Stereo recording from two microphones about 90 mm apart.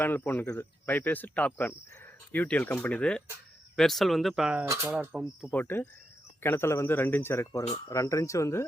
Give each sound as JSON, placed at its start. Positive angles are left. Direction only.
{"t": 0.0, "sound": "speech", "side_deg": 20}
{"t": 4.6, "sound": "speech", "side_deg": -30}
{"t": 4.9, "sound": "speech", "side_deg": -15}
{"t": 5.5, "sound": "speech", "side_deg": 20}